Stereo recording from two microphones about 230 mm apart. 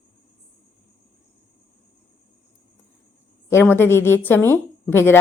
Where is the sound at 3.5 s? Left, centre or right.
Centre.